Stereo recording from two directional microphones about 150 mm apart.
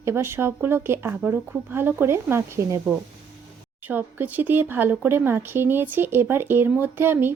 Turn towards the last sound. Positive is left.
turn(degrees=-15)  # may be behind; listen again after turning